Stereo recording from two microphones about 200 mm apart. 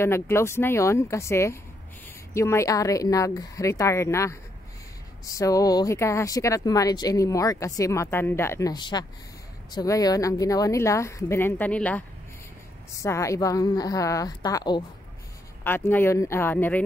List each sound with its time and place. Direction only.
0.0 s speech: 10° left (ahead or behind)
13.0 s speech: 15° left (ahead or behind)
15.6 s speech: 10° left (ahead or behind)